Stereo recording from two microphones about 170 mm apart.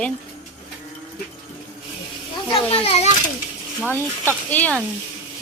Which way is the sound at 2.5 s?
35° left (ahead or behind).